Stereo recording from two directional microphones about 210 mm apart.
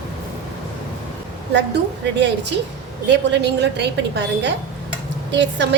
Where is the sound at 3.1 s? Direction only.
55° right (ahead or behind).